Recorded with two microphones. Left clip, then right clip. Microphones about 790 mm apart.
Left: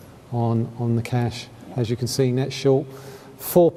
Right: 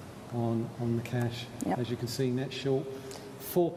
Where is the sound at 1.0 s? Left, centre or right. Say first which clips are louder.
Left 8 dB; left.